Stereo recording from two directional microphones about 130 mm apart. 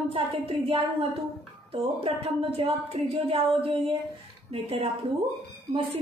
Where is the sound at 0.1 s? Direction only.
45° right (ahead or behind).